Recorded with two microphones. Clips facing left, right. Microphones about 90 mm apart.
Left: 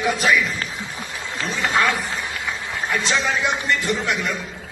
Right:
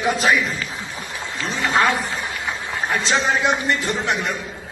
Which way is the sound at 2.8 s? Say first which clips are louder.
Right 2 dB; 30° right (ahead or behind).